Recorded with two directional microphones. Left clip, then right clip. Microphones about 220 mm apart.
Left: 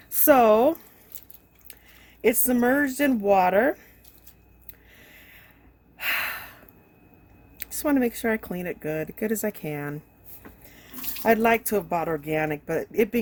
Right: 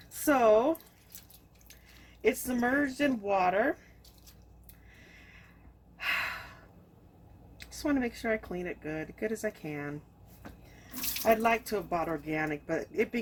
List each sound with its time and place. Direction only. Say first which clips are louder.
0.2 s speech: left 7 dB; 55° left (ahead or behind)
2.2 s speech: left 7 dB; 55° left (ahead or behind)
6.0 s gasp: left 5 dB; 55° left (ahead or behind)
7.6 s speech: left 8 dB; 55° left (ahead or behind)
11.3 s speech: left 6 dB; 55° left (ahead or behind)